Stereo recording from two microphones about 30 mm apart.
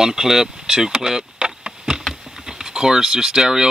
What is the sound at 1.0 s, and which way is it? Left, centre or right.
Vehicle, right.